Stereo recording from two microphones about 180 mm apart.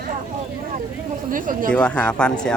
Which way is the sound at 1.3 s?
50° right (ahead or behind).